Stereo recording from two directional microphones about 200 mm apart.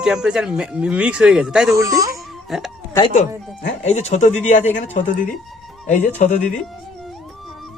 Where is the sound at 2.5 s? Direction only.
Centre (ahead or behind).